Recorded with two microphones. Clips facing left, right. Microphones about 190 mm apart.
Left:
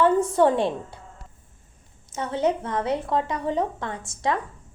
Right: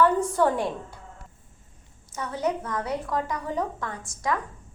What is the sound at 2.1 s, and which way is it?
A woman's voice, 25° left (ahead or behind).